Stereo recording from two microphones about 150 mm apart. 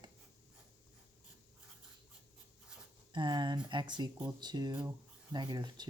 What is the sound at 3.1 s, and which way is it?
Speech, 30° right (ahead or behind).